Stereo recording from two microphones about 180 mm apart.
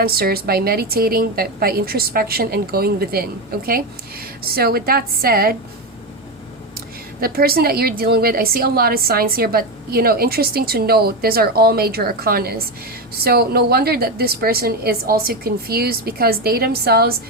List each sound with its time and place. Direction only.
0.0 s a woman's voice: 60° right (ahead or behind)
4.4 s a woman's voice: 60° right (ahead or behind)
7.2 s a woman's voice: 55° right (ahead or behind)